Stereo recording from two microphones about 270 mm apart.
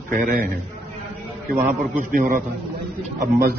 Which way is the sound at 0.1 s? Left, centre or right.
Right.